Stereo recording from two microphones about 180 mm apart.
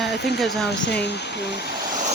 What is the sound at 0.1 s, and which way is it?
Speech, 65° left (ahead or behind).